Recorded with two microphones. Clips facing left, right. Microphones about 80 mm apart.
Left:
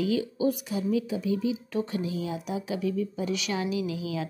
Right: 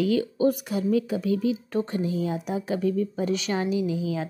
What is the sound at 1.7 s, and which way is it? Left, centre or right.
Speech, right.